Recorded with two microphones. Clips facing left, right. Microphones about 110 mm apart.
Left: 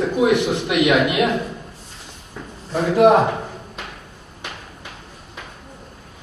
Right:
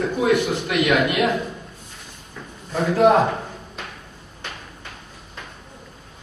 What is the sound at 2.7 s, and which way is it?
Speech, 15° left (ahead or behind).